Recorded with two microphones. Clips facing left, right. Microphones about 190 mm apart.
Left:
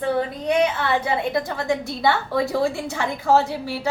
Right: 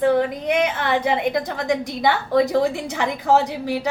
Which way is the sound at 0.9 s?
15° right (ahead or behind).